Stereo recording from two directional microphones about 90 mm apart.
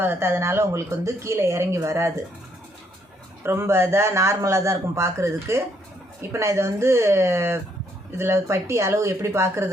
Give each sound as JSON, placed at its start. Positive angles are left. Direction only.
{"t": 0.0, "sound": "a man's voice", "side_deg": -25}
{"t": 3.4, "sound": "a man's voice", "side_deg": -30}